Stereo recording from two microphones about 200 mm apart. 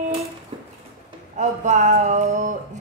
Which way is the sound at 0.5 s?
25° right (ahead or behind).